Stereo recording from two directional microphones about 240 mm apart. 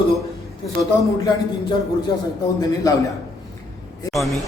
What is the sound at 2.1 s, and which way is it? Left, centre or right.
Speech, centre.